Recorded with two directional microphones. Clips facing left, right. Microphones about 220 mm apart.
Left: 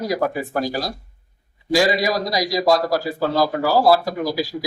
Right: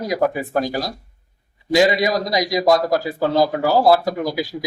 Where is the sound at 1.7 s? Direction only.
20° right (ahead or behind).